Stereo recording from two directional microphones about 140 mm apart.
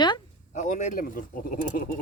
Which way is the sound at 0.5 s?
60° left (ahead or behind).